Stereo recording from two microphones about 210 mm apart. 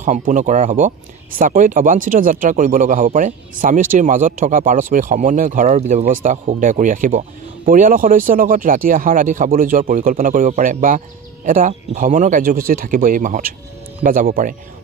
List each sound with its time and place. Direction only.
0.0 s speech: 35° right (ahead or behind)